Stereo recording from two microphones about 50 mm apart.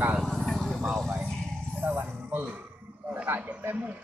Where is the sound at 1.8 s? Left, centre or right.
Right.